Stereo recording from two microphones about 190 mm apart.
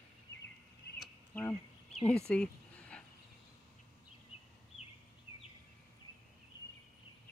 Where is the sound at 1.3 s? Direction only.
10° left (ahead or behind).